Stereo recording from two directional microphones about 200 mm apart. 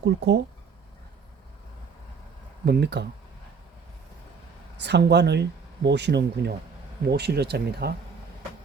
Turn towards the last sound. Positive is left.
turn(degrees=-55)  # may be behind; listen again after turning